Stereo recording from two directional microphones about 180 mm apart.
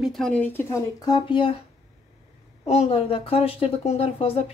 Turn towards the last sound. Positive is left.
turn(degrees=35)  # may be behind; listen again after turning